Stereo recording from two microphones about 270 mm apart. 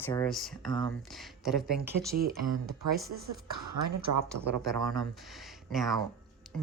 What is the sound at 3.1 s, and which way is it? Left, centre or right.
Speech, right.